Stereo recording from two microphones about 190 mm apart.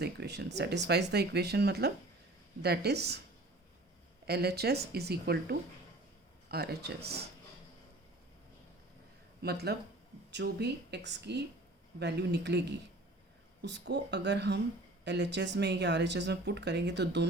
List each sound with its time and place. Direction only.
0.0 s speech: 60° right (ahead or behind)
4.3 s speech: 60° right (ahead or behind)
9.4 s speech: 55° right (ahead or behind)